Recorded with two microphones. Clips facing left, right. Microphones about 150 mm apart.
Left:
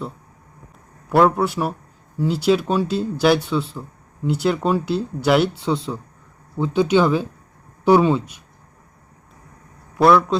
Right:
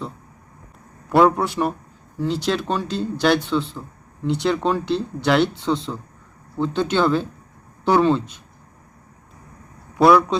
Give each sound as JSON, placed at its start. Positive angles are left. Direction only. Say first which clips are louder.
{"t": 1.1, "sound": "a man's voice", "louder": "even", "side_deg": 0}
{"t": 10.0, "sound": "a man's voice", "louder": "even", "side_deg": 0}